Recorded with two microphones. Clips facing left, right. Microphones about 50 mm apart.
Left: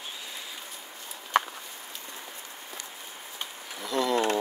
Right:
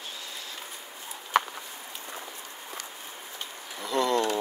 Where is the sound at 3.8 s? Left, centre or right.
Centre.